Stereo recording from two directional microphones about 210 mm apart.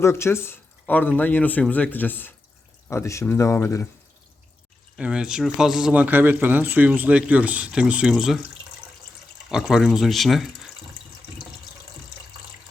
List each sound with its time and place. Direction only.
0.0 s speech: 10° left (ahead or behind)
4.9 s speech: 5° right (ahead or behind)
9.5 s speech: centre (ahead or behind)